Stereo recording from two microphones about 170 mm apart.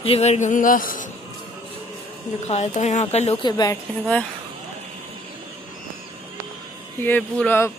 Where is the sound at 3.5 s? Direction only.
25° left (ahead or behind).